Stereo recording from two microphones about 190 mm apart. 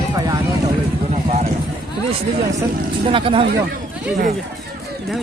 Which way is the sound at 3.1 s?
25° right (ahead or behind).